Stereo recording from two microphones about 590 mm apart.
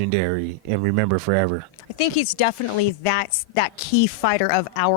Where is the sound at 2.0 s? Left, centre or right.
Left.